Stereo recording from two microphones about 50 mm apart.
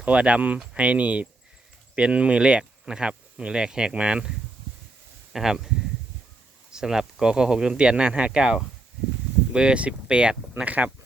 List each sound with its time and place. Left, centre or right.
0.0 s speech: right
10.7 s speech: right